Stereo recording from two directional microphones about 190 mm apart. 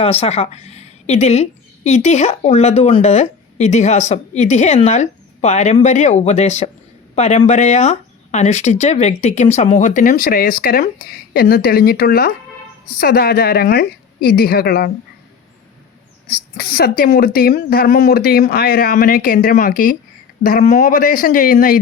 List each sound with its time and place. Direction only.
0.0 s a woman's voice: 30° left (ahead or behind); by 14.8 s 55° left (ahead or behind)
16.3 s a woman's voice: 55° left (ahead or behind)